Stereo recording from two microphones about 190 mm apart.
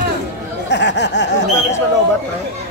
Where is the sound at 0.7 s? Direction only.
65° left (ahead or behind).